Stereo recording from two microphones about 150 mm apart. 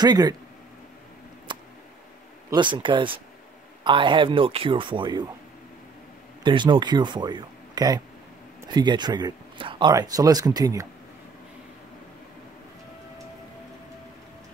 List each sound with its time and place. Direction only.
0.0 s speech: 25° right (ahead or behind)
1.5 s a sound: 30° right (ahead or behind)
2.5 s speech: 30° right (ahead or behind)
6.4 s speech: 30° right (ahead or behind)